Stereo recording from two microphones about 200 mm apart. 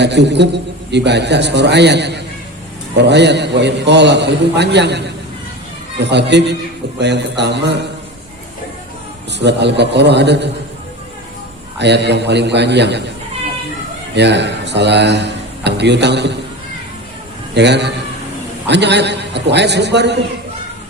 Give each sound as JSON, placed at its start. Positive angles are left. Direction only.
{"t": 0.0, "sound": "speech", "side_deg": -60}
{"t": 9.4, "sound": "speech", "side_deg": -60}
{"t": 11.8, "sound": "speech", "side_deg": -60}
{"t": 14.2, "sound": "speech", "side_deg": -60}
{"t": 17.5, "sound": "a man's voice", "side_deg": -60}